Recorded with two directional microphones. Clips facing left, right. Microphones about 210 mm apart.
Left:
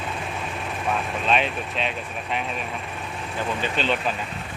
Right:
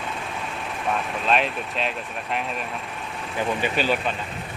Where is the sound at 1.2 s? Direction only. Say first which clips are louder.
Right 1 dB; centre (ahead or behind).